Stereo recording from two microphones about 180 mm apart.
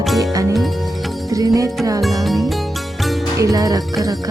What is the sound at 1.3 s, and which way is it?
Music, 20° right (ahead or behind).